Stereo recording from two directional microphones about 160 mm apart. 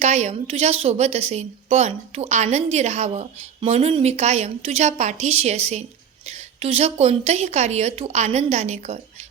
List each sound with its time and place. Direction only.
0.0 s a woman's voice: 45° right (ahead or behind)